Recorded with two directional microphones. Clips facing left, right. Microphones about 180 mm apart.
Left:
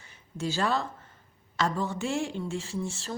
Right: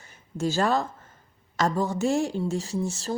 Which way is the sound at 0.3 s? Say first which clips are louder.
Right 4 dB; 45° right (ahead or behind).